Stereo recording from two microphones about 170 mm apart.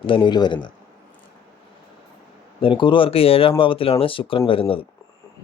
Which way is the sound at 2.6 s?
30° left (ahead or behind).